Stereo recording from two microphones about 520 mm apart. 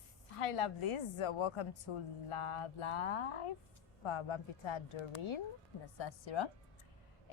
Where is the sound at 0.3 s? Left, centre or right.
Left.